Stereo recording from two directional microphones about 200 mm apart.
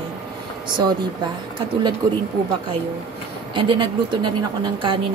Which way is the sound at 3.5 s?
25° right (ahead or behind).